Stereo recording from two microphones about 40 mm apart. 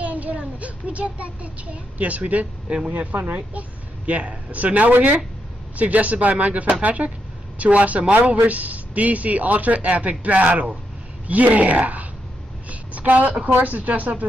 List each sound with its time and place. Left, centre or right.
0.0 s child singing: right
2.0 s speech: right
12.6 s a sound: right
13.5 s speech: right